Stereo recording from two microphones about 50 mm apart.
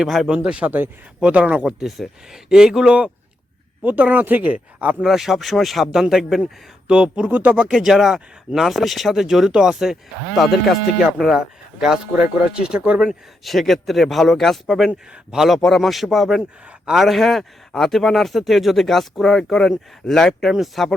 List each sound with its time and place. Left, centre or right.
0.0 s speech: centre
0.3 s speech: right
1.6 s speech: centre
3.8 s speech: right
5.0 s speech: centre
6.4 s speech: centre
7.3 s speech: right
7.7 s speech: centre
10.3 s speech: centre
11.0 s speech: centre
12.1 s speech: right
13.4 s speech: centre
14.8 s speech: centre
15.4 s speech: centre